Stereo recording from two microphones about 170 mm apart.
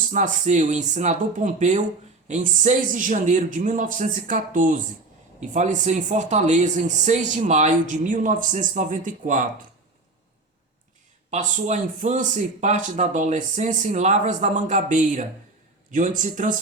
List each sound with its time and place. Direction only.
0.1 s speech: 45° right (ahead or behind)
11.3 s speech: 45° right (ahead or behind)